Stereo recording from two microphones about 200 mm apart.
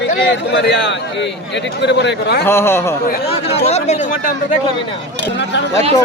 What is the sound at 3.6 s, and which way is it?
Speech, 35° left (ahead or behind).